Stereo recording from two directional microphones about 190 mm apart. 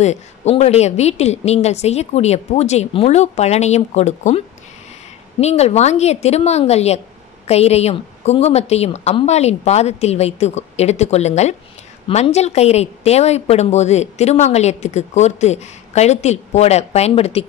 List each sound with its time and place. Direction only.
0.0 s a woman's voice: 35° left (ahead or behind)
5.4 s a woman's voice: 35° left (ahead or behind)